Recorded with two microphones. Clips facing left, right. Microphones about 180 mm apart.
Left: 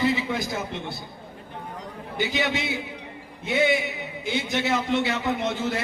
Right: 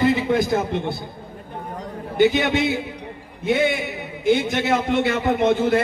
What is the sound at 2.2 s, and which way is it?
A man's voice, 55° right (ahead or behind).